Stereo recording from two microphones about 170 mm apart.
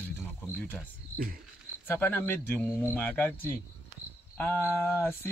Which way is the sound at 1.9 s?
10° left (ahead or behind).